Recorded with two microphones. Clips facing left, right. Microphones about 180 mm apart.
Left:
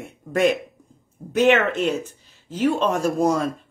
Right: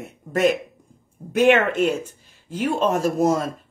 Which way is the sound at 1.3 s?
45° right (ahead or behind).